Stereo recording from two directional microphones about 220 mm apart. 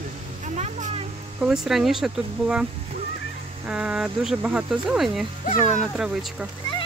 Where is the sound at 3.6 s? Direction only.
5° right (ahead or behind).